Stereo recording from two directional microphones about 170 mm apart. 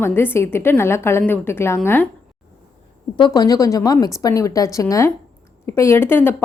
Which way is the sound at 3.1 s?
25° left (ahead or behind).